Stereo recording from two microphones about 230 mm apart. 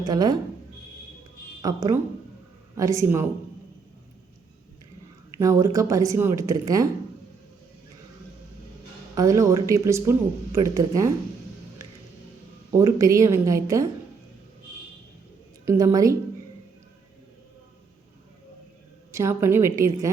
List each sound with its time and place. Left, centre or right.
0.0 s speech: centre
1.6 s speech: centre
5.4 s speech: centre
9.1 s speech: centre
11.8 s music: centre
12.7 s speech: centre
15.6 s speech: centre
19.1 s speech: centre